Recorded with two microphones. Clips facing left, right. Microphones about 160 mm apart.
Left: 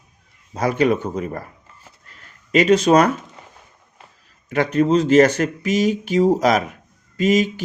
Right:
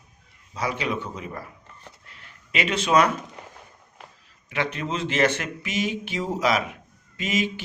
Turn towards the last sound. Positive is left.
turn(degrees=40)  # may be behind; listen again after turning